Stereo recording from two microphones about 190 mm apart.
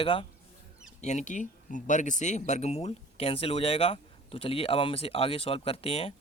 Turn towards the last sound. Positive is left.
turn(degrees=30)  # may be behind; listen again after turning